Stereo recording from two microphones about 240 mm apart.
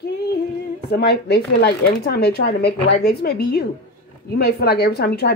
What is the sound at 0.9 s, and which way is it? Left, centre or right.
Speech, left.